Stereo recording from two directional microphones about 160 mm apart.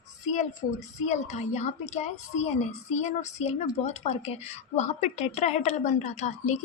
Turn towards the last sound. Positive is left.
turn(degrees=45)  # may be behind; listen again after turning